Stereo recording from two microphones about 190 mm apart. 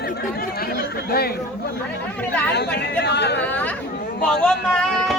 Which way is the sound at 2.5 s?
60° left (ahead or behind).